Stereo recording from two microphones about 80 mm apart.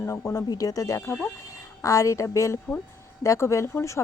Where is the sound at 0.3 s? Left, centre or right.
Left.